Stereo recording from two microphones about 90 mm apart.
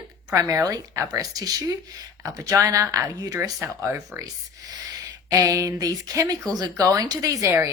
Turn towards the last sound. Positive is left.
turn(degrees=-40)  # may be behind; listen again after turning